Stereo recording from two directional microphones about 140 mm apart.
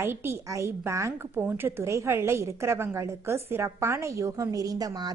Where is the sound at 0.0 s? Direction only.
15° right (ahead or behind).